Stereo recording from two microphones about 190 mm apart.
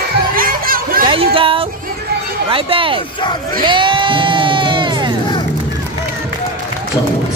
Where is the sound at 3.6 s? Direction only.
25° right (ahead or behind).